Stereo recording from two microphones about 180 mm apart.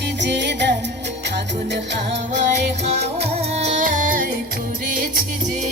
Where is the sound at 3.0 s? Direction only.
35° right (ahead or behind).